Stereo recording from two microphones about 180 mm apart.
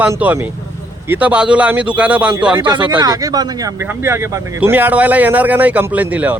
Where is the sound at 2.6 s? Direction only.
25° right (ahead or behind); by 6.4 s 10° right (ahead or behind).